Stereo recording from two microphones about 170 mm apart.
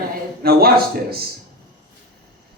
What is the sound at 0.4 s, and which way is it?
Speech, 60° right (ahead or behind).